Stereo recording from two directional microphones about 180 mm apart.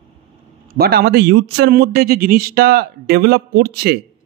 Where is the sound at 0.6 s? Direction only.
60° right (ahead or behind).